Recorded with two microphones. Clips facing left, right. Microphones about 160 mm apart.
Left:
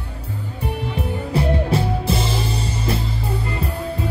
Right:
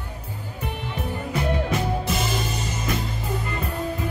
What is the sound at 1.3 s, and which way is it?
Music, 30° left (ahead or behind).